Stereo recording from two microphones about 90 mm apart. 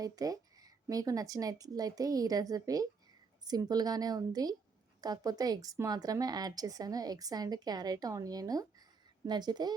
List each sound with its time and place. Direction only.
0.0 s speech: 40° right (ahead or behind)